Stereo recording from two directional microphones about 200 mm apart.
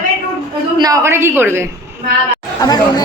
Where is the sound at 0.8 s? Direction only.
15° right (ahead or behind).